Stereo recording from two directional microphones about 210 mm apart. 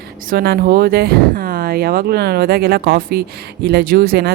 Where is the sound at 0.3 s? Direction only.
45° right (ahead or behind).